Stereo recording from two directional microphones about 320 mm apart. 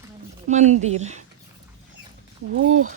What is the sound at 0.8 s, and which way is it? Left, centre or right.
Speech, right.